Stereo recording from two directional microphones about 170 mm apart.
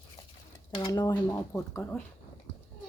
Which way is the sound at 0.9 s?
20° left (ahead or behind).